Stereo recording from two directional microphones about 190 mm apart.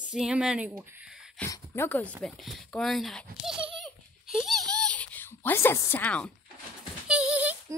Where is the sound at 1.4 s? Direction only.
10° left (ahead or behind).